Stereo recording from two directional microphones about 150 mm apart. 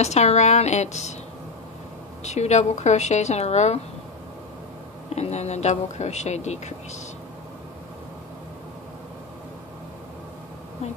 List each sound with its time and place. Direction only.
0.0 s speech: 45° left (ahead or behind)
2.2 s speech: 50° left (ahead or behind)
5.1 s speech: 45° left (ahead or behind)